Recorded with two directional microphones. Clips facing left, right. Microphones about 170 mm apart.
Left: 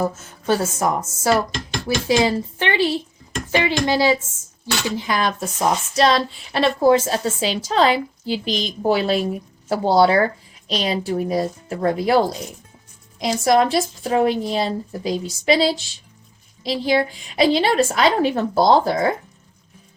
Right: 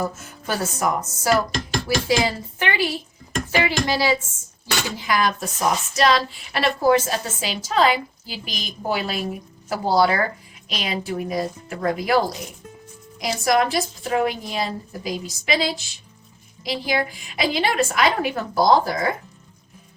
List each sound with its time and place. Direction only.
0.0 s speech: 30° left (ahead or behind)